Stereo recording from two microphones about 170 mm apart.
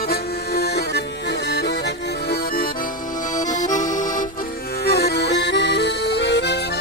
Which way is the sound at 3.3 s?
45° left (ahead or behind).